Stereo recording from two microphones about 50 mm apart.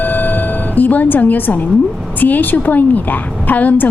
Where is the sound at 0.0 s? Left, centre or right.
Left.